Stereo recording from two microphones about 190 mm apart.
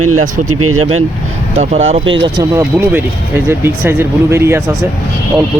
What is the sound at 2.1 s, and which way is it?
Speech, 20° right (ahead or behind).